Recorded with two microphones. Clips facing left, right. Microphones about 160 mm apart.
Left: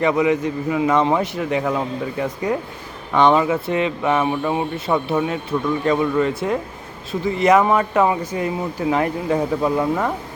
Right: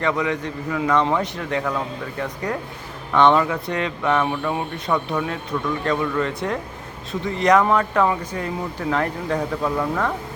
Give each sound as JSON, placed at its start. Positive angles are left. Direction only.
{"t": 0.0, "sound": "speech", "side_deg": 10}
{"t": 4.9, "sound": "speech", "side_deg": 20}